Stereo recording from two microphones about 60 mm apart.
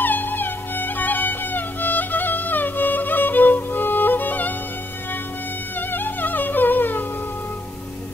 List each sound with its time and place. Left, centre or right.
0.0 s music: left
5.8 s music: left